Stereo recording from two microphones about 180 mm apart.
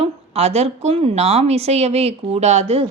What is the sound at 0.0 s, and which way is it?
A woman's voice, 35° right (ahead or behind).